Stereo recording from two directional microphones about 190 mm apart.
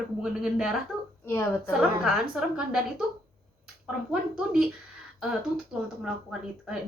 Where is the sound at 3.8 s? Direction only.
5° right (ahead or behind).